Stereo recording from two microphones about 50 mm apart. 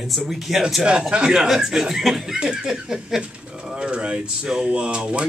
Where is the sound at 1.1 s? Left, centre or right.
Centre.